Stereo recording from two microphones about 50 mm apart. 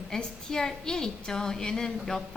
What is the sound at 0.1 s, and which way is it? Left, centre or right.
A woman's voice, centre.